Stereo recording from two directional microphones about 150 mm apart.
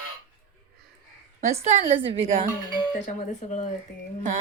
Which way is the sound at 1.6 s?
40° right (ahead or behind).